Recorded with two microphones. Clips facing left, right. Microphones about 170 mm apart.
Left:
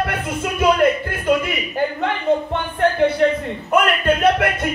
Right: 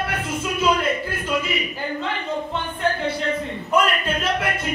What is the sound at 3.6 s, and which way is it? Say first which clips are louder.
Speech: left 4 dB; 60° left (ahead or behind).